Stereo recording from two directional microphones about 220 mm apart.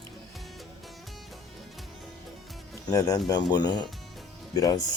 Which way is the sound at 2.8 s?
15° left (ahead or behind).